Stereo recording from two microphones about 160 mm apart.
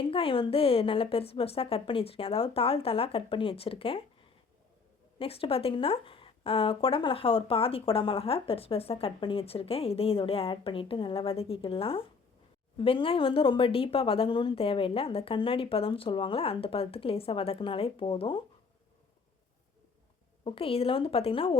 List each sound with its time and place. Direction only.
0.1 s a woman's voice: 35° left (ahead or behind)
5.2 s a woman's voice: 35° left (ahead or behind)
20.4 s a woman's voice: 35° left (ahead or behind)